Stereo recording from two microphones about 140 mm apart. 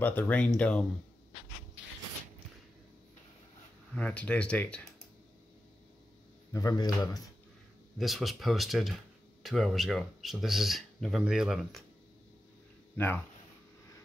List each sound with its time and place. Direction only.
0.0 s speech: 10° left (ahead or behind)
3.9 s speech: 10° left (ahead or behind)
6.5 s speech: 25° left (ahead or behind)
8.0 s speech: centre (ahead or behind)
12.9 s speech: 15° left (ahead or behind)